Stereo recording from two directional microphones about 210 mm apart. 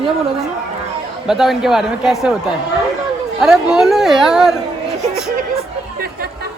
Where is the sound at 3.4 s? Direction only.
Centre (ahead or behind).